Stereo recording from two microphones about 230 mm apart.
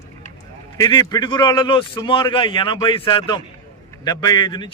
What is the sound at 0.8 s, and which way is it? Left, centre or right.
A man's voice, centre.